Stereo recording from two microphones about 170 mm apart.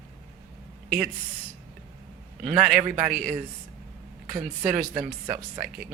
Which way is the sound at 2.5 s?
5° right (ahead or behind).